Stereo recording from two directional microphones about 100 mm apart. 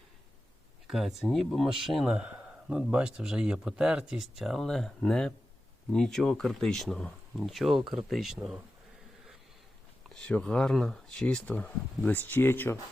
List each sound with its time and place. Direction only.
0.9 s speech: centre (ahead or behind)
10.2 s speech: 10° left (ahead or behind)